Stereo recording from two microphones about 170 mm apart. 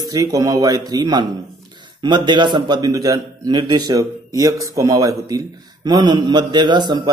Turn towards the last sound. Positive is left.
turn(degrees=-25)  # may be behind; listen again after turning